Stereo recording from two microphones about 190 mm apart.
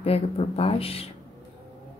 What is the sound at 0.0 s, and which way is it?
Speech, 30° left (ahead or behind).